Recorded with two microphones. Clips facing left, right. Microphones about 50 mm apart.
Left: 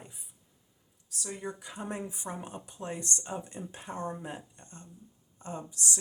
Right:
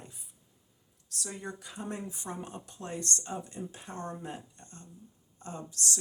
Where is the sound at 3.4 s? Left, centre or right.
Left.